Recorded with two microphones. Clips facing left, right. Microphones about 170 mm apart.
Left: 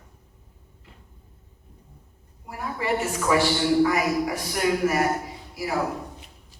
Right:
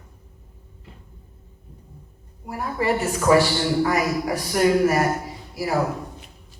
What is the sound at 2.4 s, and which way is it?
A woman's voice, 40° right (ahead or behind).